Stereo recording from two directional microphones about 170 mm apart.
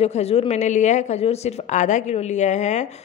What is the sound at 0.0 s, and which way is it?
A woman's voice, 35° left (ahead or behind).